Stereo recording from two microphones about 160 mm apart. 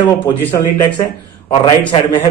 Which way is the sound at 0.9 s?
30° left (ahead or behind).